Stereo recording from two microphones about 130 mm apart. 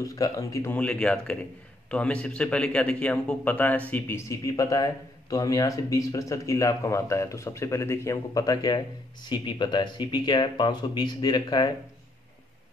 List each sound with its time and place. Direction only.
0.0 s a man's voice: 25° left (ahead or behind)
0.7 s a man's voice: 10° left (ahead or behind); by 11.7 s 30° left (ahead or behind)